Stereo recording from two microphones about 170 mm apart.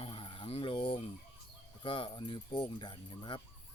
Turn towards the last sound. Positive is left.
turn(degrees=30)  # may be behind; listen again after turning